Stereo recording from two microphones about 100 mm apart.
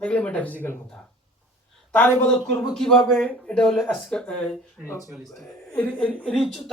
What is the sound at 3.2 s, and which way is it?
Speech, 10° left (ahead or behind).